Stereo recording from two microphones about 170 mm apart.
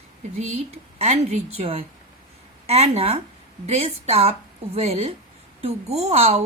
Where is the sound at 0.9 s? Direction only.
40° right (ahead or behind).